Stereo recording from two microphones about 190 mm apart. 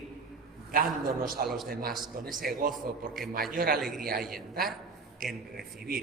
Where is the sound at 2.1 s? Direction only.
50° right (ahead or behind).